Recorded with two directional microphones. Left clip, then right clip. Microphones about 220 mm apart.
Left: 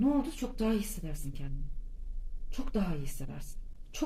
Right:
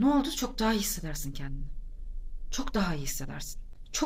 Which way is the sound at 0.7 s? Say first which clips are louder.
Right 4 dB; 45° right (ahead or behind).